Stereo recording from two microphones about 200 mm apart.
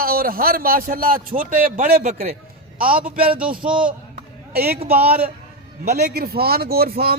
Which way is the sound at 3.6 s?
5° right (ahead or behind).